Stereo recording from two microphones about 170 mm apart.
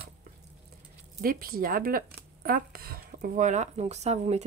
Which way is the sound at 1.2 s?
60° right (ahead or behind).